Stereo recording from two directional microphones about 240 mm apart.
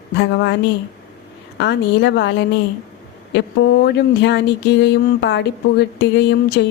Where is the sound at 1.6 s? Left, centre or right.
Left.